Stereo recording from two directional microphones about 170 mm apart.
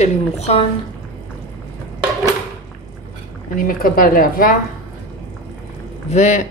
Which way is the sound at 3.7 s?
55° left (ahead or behind).